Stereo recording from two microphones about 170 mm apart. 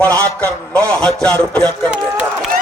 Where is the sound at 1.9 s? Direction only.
10° right (ahead or behind).